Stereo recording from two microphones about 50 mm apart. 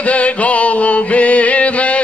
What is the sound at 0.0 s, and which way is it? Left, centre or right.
Music, left.